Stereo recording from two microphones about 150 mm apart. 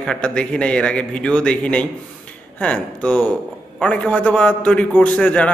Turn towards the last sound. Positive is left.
turn(degrees=10)  # may be behind; listen again after turning